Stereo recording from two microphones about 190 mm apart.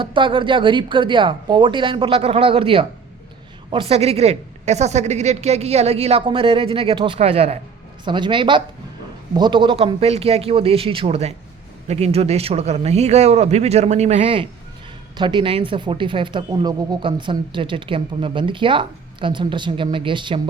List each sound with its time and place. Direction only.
0.0 s a woman's voice: 25° right (ahead or behind)